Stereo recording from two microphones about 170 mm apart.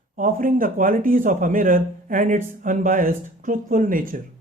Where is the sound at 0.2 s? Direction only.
55° right (ahead or behind).